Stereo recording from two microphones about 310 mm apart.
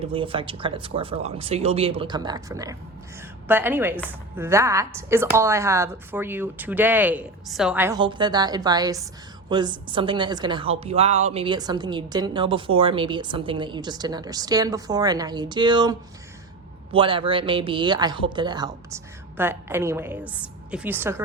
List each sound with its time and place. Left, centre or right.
0.0 s a woman's voice: centre